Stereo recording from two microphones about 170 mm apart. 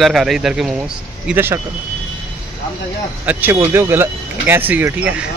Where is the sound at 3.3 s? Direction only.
10° right (ahead or behind).